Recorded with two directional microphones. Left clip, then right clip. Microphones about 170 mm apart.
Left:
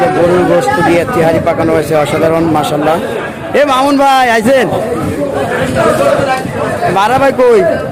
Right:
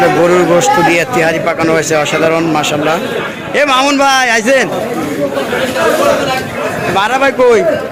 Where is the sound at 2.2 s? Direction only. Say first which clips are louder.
Left 1 dB; 15° left (ahead or behind).